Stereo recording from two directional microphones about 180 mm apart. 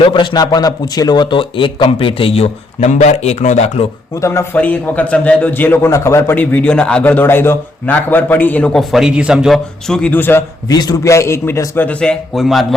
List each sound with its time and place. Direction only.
0.0 s a man's voice: 25° left (ahead or behind)
4.1 s a man's voice: 15° left (ahead or behind); by 12.6 s centre (ahead or behind)